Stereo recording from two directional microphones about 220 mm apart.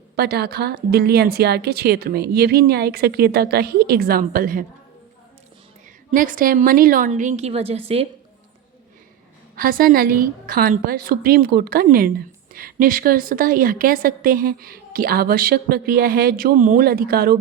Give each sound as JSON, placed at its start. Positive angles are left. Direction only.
{"t": 0.2, "sound": "a woman's voice", "side_deg": -45}
{"t": 6.1, "sound": "a woman's voice", "side_deg": -40}
{"t": 9.6, "sound": "a woman's voice", "side_deg": -40}